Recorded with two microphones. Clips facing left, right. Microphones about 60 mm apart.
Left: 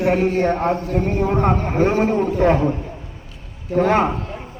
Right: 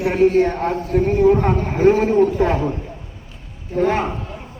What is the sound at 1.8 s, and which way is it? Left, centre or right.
Speech, left.